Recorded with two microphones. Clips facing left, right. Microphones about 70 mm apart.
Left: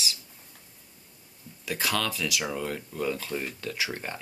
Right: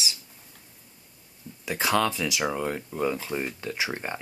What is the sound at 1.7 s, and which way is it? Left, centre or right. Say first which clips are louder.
Speech: right 5 dB; right.